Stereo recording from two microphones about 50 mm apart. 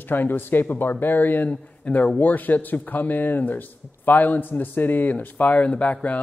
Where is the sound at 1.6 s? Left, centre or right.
Left.